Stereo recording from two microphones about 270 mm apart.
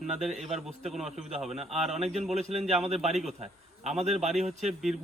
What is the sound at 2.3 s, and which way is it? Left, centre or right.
Speech, right.